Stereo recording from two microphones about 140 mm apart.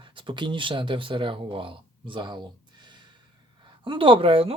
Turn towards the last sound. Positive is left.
turn(degrees=-40)  # may be behind; listen again after turning